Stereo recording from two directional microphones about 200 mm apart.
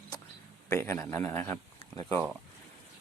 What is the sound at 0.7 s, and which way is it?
Speech, 10° left (ahead or behind).